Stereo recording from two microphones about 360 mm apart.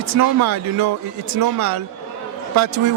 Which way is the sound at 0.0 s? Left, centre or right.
Right.